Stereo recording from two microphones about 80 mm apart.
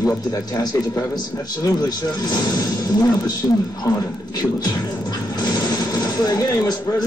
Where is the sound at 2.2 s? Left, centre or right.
Left.